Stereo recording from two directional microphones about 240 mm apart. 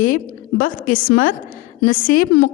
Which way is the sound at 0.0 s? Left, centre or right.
Left.